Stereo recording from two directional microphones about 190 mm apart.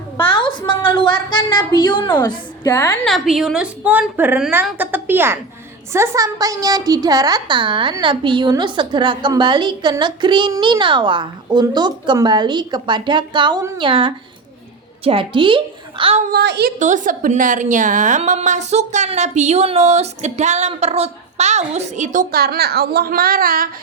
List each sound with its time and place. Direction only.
0.3 s a sound: 25° left (ahead or behind)
1.3 s a woman's voice: 25° left (ahead or behind)
3.1 s a woman's voice: centre (ahead or behind); by 16.2 s 30° right (ahead or behind)
16.3 s a woman's voice: 60° right (ahead or behind)
16.8 s a woman's voice: 45° right (ahead or behind)